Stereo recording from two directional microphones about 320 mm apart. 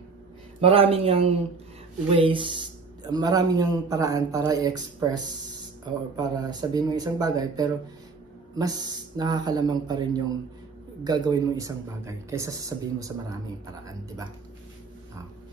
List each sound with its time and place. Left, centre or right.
0.6 s speech: centre
11.2 s speech: centre